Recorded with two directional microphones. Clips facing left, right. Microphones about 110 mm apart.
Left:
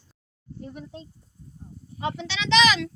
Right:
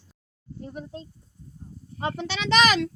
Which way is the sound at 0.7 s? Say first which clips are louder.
Right 5 dB; 40° right (ahead or behind).